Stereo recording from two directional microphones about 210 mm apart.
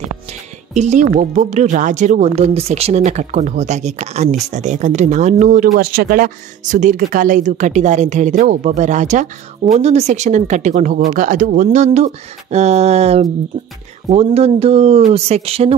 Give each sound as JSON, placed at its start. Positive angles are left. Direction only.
{"t": 0.7, "sound": "speech", "side_deg": -35}